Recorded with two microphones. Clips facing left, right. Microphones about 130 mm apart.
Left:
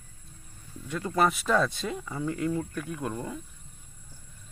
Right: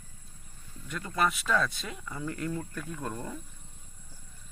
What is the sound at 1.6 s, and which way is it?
Speech, 25° left (ahead or behind).